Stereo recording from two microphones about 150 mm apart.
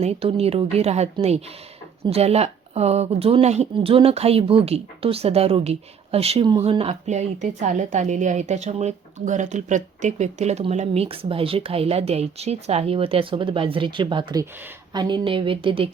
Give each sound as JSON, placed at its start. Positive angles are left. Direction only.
{"t": 0.0, "sound": "a woman's voice", "side_deg": -40}